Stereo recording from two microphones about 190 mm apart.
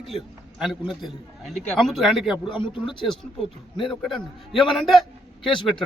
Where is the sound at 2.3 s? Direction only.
25° left (ahead or behind).